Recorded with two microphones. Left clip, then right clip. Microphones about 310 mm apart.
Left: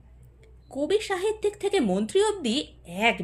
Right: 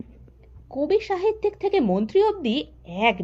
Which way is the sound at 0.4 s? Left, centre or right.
Centre.